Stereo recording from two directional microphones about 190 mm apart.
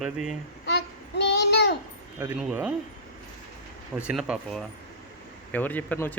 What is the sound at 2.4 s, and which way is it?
Speech, 5° right (ahead or behind).